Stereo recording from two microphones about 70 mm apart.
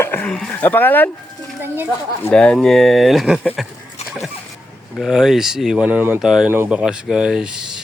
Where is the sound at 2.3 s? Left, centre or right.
Centre.